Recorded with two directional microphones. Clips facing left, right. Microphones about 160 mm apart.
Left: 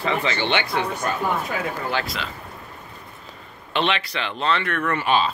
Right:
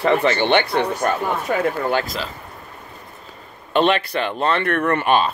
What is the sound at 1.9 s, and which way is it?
Speech, 45° right (ahead or behind).